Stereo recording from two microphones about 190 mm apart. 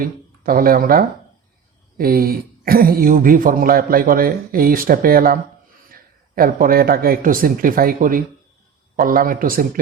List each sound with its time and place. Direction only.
0.0 s speech: 50° right (ahead or behind)